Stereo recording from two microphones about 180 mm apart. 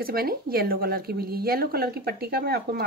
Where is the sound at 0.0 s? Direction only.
55° right (ahead or behind).